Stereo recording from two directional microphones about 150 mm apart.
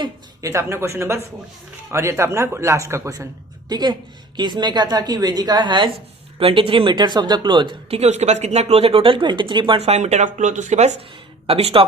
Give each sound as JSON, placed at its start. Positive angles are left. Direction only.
{"t": 0.0, "sound": "a woman's voice", "side_deg": -20}
{"t": 11.4, "sound": "speech", "side_deg": -40}